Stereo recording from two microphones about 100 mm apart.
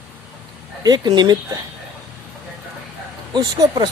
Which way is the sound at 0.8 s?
40° right (ahead or behind).